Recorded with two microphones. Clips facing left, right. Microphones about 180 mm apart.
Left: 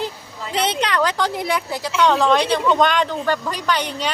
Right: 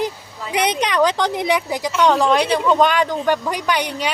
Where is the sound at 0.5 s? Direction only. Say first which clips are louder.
Right 2 dB; 15° right (ahead or behind).